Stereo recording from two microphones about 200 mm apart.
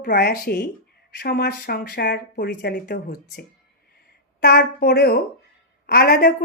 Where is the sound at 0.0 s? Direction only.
50° left (ahead or behind).